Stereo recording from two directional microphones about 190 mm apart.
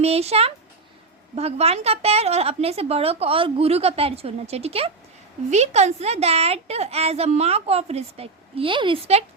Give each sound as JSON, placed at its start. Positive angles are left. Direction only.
{"t": 0.0, "sound": "a woman's voice", "side_deg": -35}